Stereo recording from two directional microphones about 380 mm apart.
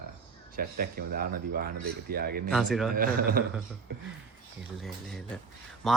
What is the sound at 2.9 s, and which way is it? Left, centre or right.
Speech, right.